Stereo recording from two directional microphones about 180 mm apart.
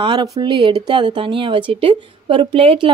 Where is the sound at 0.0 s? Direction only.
25° right (ahead or behind).